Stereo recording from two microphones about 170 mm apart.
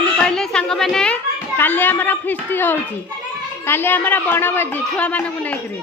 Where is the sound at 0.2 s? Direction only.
5° left (ahead or behind).